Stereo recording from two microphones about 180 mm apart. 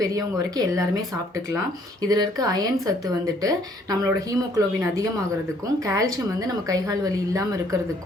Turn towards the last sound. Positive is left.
turn(degrees=-20)  # may be behind; listen again after turning